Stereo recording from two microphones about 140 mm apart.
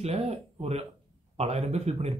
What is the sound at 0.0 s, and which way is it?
Speech, 50° right (ahead or behind).